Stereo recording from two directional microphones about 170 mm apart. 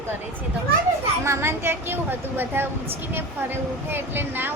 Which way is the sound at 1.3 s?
15° right (ahead or behind).